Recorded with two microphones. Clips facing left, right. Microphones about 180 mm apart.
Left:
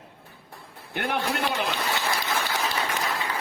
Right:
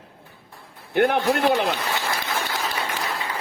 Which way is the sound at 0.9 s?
50° right (ahead or behind).